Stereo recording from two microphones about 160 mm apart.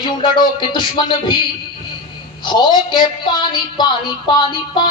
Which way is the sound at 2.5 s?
30° left (ahead or behind).